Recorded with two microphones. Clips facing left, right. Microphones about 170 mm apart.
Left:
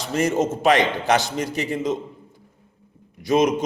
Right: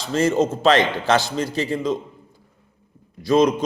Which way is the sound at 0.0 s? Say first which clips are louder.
Right 2 dB; 15° left (ahead or behind).